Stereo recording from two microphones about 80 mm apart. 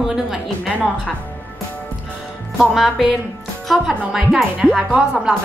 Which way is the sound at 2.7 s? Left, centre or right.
Centre.